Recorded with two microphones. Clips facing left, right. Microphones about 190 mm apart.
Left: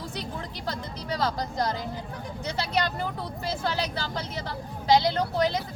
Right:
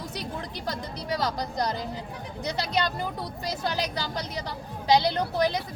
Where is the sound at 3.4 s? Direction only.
15° right (ahead or behind).